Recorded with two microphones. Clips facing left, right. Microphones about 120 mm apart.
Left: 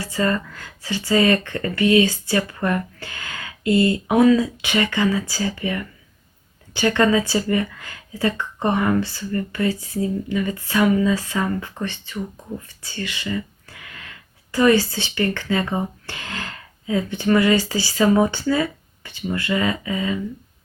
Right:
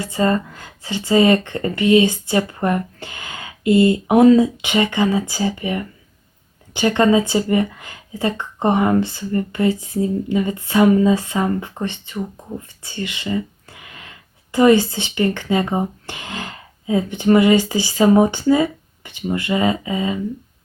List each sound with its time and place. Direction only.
0.0 s speech: 20° right (ahead or behind)
10.8 s speech: 30° right (ahead or behind)
11.1 s speech: 20° right (ahead or behind)